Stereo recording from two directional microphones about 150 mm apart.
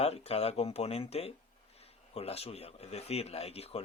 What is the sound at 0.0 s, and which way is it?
Speech, 40° left (ahead or behind).